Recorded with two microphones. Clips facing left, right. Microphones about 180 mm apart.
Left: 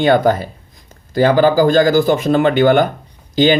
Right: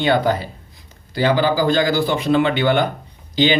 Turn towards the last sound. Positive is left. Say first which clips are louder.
# left 5 dB
turn(degrees=45)  # may be behind; listen again after turning